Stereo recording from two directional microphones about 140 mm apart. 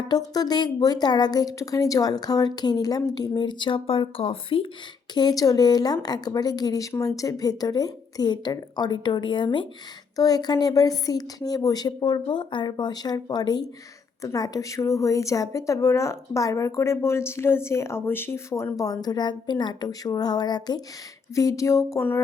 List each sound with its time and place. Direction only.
0.1 s a woman's voice: 30° left (ahead or behind)
5.1 s a woman's voice: 25° left (ahead or behind)